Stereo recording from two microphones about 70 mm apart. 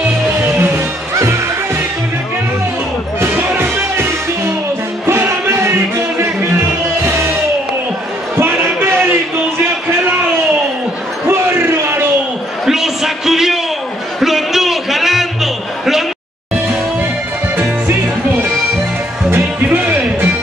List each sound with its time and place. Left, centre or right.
0.4 s music: right
3.2 s music: right
8.4 s basketball bounce: right
11.2 s a sound: right
12.6 s a sound: centre
19.8 s music: right